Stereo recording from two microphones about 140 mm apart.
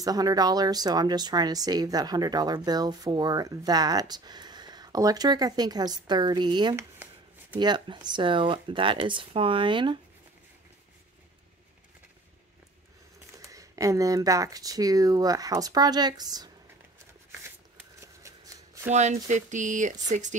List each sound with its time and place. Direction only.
0.0 s speech: 25° right (ahead or behind)
13.4 s speech: 25° right (ahead or behind)
17.7 s scissors: 20° right (ahead or behind)
18.9 s speech: 55° right (ahead or behind)